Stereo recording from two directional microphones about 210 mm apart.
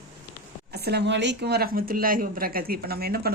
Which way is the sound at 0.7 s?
50° right (ahead or behind).